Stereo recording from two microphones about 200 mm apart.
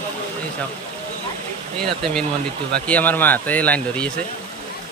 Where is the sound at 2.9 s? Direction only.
10° left (ahead or behind).